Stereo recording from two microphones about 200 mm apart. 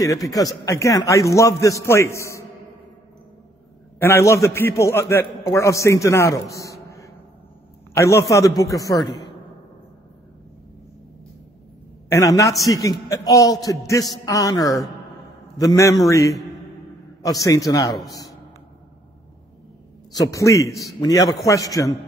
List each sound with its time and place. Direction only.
0.0 s a man's voice: 15° left (ahead or behind)
4.0 s a man's voice: 15° left (ahead or behind)
7.9 s a man's voice: 15° left (ahead or behind)
12.1 s a man's voice: 15° left (ahead or behind)
20.2 s a man's voice: 15° left (ahead or behind)